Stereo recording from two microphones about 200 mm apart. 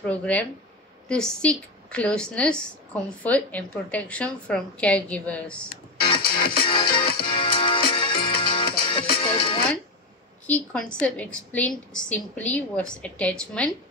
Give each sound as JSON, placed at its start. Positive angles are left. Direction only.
{"t": 0.0, "sound": "a woman's voice", "side_deg": 5}
{"t": 6.6, "sound": "music", "side_deg": 25}
{"t": 9.3, "sound": "speech", "side_deg": 25}
{"t": 10.4, "sound": "a woman's voice", "side_deg": 5}